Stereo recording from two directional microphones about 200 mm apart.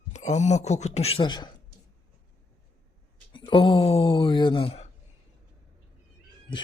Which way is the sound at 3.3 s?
25° left (ahead or behind).